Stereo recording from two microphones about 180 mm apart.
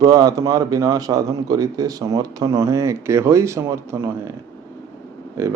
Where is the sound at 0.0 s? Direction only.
20° right (ahead or behind).